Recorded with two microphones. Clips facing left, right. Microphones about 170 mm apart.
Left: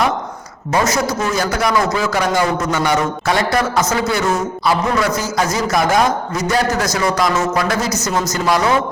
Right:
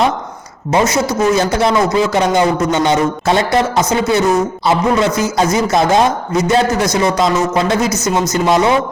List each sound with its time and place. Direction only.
0.7 s a man's voice: 20° right (ahead or behind)